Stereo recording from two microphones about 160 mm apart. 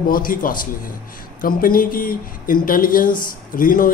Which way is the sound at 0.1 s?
60° left (ahead or behind).